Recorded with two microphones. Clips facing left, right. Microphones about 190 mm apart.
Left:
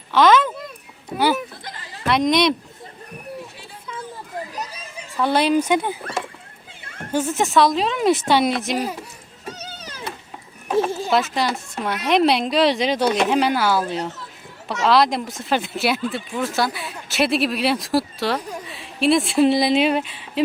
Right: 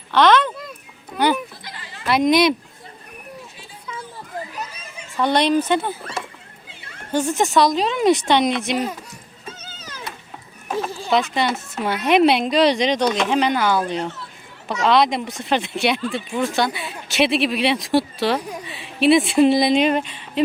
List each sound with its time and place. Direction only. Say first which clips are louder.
0.1 s speech: even; 5° left (ahead or behind)
1.6 s a sound: left 2 dB; 40° left (ahead or behind)
2.0 s speech: right 2 dB; 5° right (ahead or behind)
4.5 s a sound: left 1 dB; 35° left (ahead or behind)
5.1 s speech: even; 5° left (ahead or behind)
7.1 s speech: right 1 dB; 5° left (ahead or behind)
11.1 s speech: right 3 dB; centre (ahead or behind)